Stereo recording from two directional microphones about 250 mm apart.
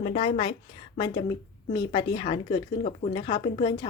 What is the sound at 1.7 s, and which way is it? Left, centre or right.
A woman's voice, centre.